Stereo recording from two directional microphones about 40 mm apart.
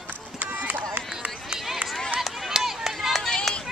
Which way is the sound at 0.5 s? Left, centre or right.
Right.